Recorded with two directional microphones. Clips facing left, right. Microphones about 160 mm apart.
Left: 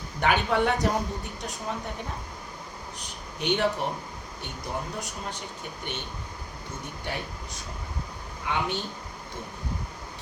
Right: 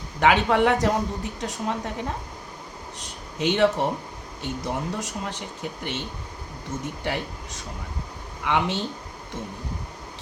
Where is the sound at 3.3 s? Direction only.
85° right.